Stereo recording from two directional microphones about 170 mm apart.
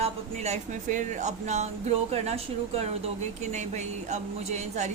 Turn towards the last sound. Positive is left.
turn(degrees=-40)  # may be behind; listen again after turning